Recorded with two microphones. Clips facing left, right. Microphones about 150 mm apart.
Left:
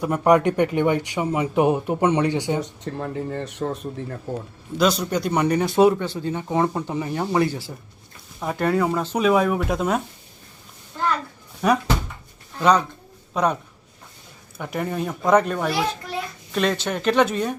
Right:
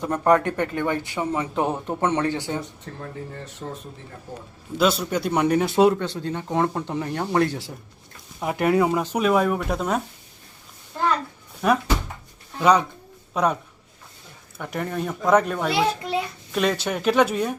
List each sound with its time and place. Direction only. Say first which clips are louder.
0.0 s speech: left 2 dB; 10° left (ahead or behind)
2.6 s speech: left 6 dB; 70° left (ahead or behind)
4.8 s speech: left 1 dB; 5° right (ahead or behind)
8.4 s speech: right 1 dB; 15° right (ahead or behind)
9.2 s speech: left 2 dB; centre (ahead or behind)
11.6 s speech: left 1 dB; centre (ahead or behind)
14.6 s speech: left 1 dB; 5° left (ahead or behind)